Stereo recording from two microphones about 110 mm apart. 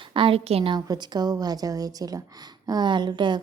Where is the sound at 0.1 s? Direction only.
55° right (ahead or behind).